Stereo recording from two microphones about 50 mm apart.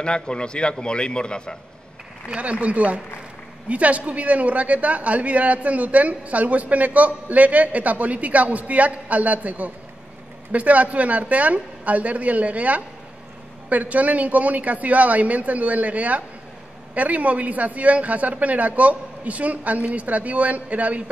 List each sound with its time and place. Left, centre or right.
0.0 s a man's voice: centre
2.2 s a woman's voice: right